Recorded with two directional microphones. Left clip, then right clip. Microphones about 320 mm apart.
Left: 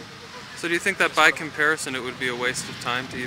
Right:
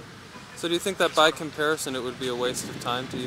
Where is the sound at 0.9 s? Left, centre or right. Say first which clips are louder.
Left 2 dB; left.